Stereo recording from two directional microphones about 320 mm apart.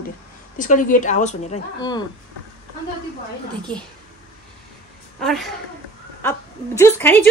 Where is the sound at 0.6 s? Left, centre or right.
Left.